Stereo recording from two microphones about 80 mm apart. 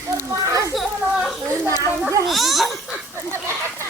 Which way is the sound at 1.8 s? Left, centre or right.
Right.